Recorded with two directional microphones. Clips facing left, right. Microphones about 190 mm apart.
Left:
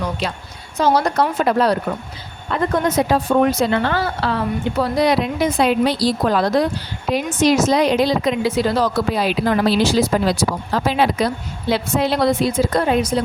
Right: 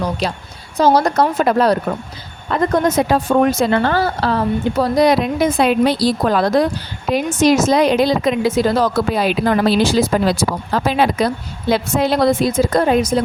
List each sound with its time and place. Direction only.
0.2 s a woman's voice: 40° right (ahead or behind)